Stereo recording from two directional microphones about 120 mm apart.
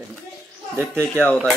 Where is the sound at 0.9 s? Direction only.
10° left (ahead or behind).